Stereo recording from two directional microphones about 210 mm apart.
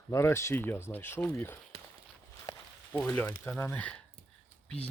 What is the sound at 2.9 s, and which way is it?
Speech, 5° left (ahead or behind).